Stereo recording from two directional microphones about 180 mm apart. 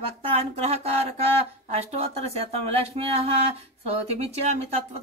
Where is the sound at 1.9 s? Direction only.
35° right (ahead or behind).